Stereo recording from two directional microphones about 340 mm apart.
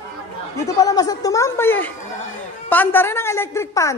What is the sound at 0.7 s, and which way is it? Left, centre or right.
A woman's voice, centre.